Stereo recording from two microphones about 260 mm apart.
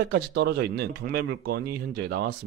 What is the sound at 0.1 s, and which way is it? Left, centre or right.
Speech, right.